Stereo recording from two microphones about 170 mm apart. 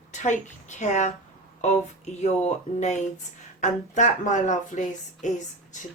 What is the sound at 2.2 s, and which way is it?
Speech, 40° left (ahead or behind).